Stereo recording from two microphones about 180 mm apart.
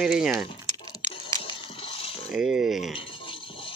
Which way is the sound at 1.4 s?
30° left (ahead or behind).